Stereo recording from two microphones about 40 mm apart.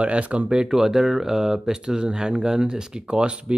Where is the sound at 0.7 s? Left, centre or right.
Centre.